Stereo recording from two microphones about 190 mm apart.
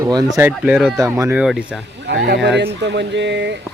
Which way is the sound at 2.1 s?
65° right (ahead or behind).